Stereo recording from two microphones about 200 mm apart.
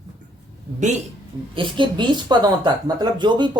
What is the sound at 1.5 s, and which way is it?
Speech, 25° right (ahead or behind).